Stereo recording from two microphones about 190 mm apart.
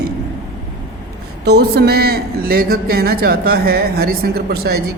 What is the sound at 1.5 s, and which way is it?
A man's voice, 55° right (ahead or behind).